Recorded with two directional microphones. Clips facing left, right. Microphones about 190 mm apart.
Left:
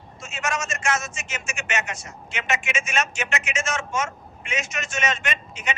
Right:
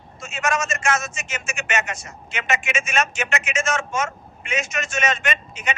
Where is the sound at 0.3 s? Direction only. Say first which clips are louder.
Right 4 dB; 50° right (ahead or behind).